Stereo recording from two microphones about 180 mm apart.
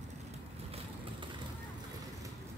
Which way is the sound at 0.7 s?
35° right (ahead or behind).